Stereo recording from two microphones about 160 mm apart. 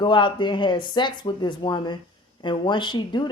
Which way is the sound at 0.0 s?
30° left (ahead or behind).